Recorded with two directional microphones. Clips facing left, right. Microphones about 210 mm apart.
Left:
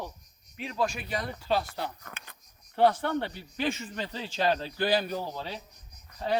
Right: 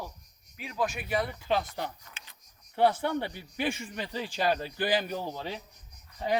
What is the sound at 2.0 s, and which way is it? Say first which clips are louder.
Speech: left 7 dB; 55° left (ahead or behind).